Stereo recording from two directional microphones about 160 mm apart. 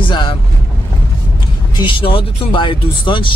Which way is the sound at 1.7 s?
30° left (ahead or behind).